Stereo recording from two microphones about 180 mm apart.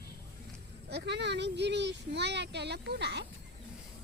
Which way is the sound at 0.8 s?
70° right (ahead or behind).